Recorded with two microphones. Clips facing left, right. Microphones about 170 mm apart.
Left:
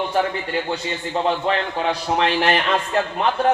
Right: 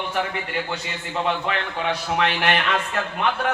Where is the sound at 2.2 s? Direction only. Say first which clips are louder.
Left 3 dB; 30° left (ahead or behind).